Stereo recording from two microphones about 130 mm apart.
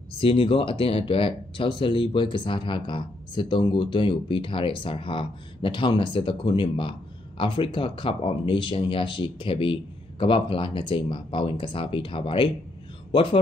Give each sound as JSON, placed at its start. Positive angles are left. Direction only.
{"t": 0.2, "sound": "speech", "side_deg": 40}